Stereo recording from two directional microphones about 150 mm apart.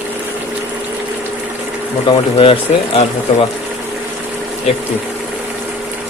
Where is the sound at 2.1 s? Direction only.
35° left (ahead or behind).